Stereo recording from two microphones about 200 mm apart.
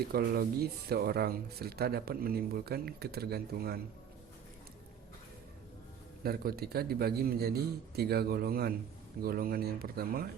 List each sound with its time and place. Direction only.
0.1 s speech: 50° right (ahead or behind)
6.2 s speech: 50° right (ahead or behind)